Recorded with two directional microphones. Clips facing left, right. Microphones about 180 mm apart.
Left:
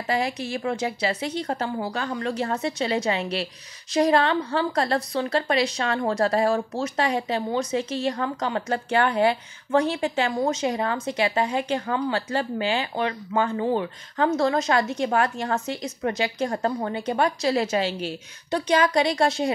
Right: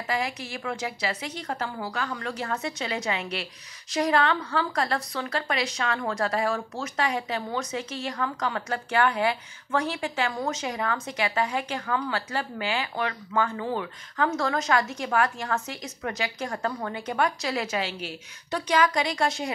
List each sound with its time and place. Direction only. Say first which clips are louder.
0.0 s a woman's voice: left 4 dB; 30° left (ahead or behind)